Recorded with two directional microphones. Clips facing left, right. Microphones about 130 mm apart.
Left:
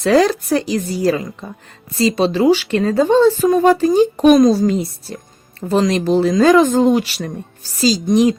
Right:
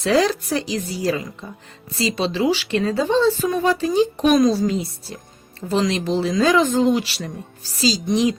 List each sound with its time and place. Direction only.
0.0 s speech: 50° left (ahead or behind)